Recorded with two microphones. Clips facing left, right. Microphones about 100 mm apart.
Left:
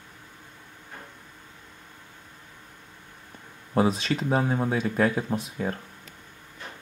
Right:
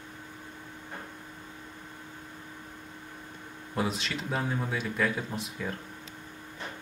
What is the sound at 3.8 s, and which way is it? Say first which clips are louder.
Speech: left 8 dB; 40° left (ahead or behind).